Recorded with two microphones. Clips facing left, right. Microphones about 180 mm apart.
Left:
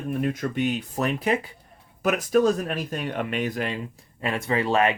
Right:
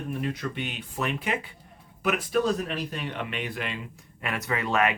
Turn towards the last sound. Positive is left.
turn(degrees=30)  # may be behind; listen again after turning